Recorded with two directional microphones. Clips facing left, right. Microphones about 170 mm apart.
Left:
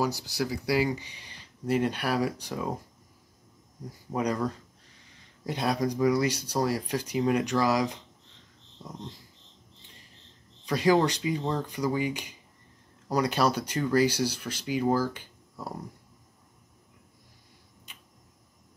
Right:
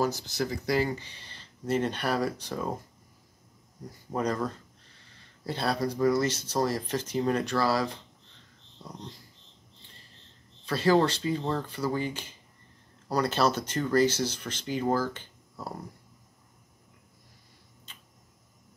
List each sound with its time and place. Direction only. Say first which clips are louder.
0.0 s speech: even; 10° left (ahead or behind)
4.1 s speech: left 1 dB; 10° left (ahead or behind)
10.6 s speech: even; 15° left (ahead or behind)